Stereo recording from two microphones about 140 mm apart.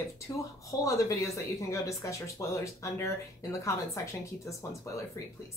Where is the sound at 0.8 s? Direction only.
20° left (ahead or behind).